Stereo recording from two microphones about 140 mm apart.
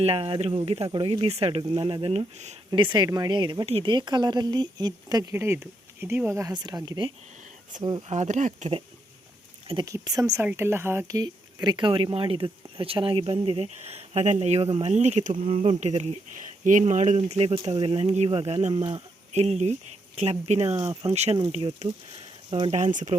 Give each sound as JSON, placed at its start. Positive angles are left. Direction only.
{"t": 0.0, "sound": "speech", "side_deg": -40}
{"t": 8.1, "sound": "speech", "side_deg": -55}
{"t": 9.8, "sound": "speech", "side_deg": -25}
{"t": 11.2, "sound": "speech", "side_deg": -30}
{"t": 15.4, "sound": "speech", "side_deg": -40}
{"t": 19.3, "sound": "speech", "side_deg": -50}
{"t": 20.9, "sound": "speech", "side_deg": -35}
{"t": 21.8, "sound": "a sound", "side_deg": -40}
{"t": 22.8, "sound": "speech", "side_deg": -60}